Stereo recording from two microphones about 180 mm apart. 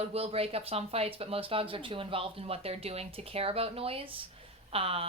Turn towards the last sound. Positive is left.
turn(degrees=-35)  # may be behind; listen again after turning